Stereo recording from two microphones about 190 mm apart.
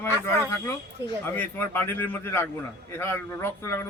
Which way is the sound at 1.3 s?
10° left (ahead or behind).